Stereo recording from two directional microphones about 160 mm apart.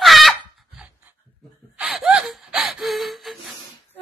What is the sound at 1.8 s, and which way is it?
Gasp, 5° right (ahead or behind).